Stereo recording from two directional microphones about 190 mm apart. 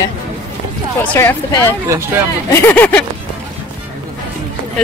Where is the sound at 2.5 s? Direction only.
10° left (ahead or behind).